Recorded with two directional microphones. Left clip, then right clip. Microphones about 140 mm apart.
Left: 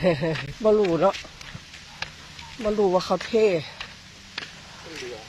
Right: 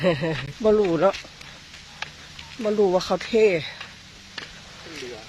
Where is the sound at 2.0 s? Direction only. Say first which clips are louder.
Even; 90° left.